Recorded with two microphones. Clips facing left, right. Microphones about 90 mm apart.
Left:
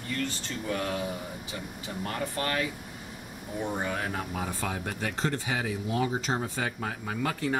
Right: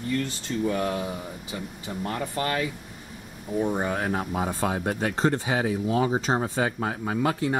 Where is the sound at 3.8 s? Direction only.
35° right (ahead or behind).